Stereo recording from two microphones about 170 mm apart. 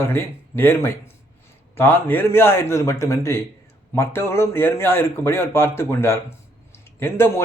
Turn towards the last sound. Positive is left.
turn(degrees=15)  # may be behind; listen again after turning